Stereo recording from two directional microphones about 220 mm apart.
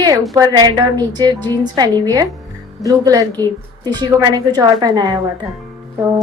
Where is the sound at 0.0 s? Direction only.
15° right (ahead or behind).